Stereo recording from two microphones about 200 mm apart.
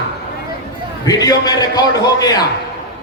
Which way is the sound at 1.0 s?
20° left (ahead or behind).